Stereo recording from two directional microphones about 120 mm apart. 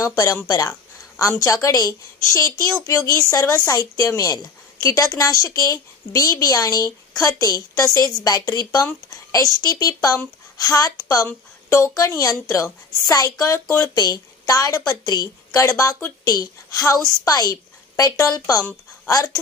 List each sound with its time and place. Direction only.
0.0 s a woman's voice: 25° left (ahead or behind)